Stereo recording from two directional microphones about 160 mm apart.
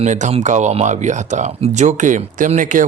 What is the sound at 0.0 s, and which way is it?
Speech, 45° right (ahead or behind).